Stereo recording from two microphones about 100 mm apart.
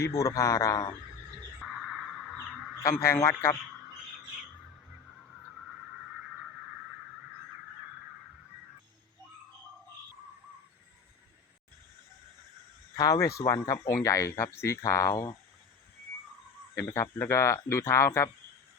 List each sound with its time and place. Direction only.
0.0 s speech: 35° left (ahead or behind)
1.6 s a sound: 5° right (ahead or behind)
3.0 s speech: 25° left (ahead or behind)
13.0 s speech: 35° left (ahead or behind)
16.7 s speech: 30° left (ahead or behind)